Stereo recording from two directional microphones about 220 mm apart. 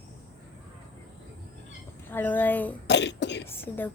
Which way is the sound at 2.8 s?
50° left (ahead or behind).